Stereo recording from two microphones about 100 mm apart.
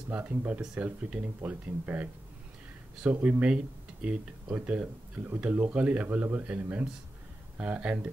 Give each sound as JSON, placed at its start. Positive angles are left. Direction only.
{"t": 0.1, "sound": "speech", "side_deg": -20}